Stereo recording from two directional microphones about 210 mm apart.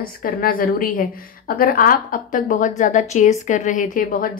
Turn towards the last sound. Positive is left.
turn(degrees=40)  # may be behind; listen again after turning